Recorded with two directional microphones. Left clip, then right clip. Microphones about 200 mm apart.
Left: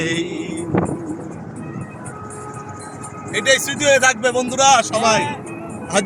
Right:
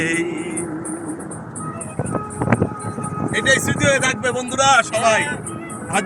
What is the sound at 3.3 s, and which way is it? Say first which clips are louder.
Speech: left 1 dB; 15° left (ahead or behind).